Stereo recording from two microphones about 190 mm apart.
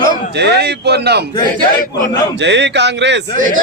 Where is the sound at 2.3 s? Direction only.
70° right (ahead or behind).